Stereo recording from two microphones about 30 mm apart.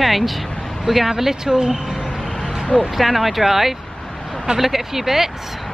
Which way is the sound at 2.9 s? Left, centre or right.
Centre.